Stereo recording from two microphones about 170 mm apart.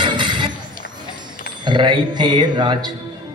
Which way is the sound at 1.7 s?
25° right (ahead or behind).